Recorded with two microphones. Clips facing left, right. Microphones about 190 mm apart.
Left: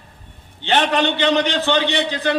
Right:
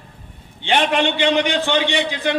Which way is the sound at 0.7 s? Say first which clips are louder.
Even; 10° right (ahead or behind).